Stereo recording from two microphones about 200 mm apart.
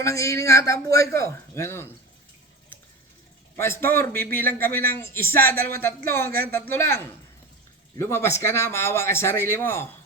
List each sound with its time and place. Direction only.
0.0 s a man's voice: 15° left (ahead or behind)
3.6 s a man's voice: 10° left (ahead or behind)
5.5 s speech: 50° right (ahead or behind)
5.8 s a man's voice: 10° left (ahead or behind)